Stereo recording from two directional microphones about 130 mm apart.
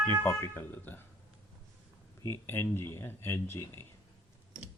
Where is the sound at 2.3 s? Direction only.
20° left (ahead or behind).